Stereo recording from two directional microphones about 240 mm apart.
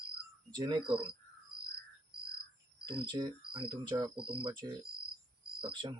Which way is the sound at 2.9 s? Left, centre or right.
Centre.